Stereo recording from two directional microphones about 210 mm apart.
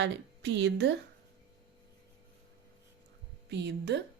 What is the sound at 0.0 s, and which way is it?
Speech, 55° right (ahead or behind).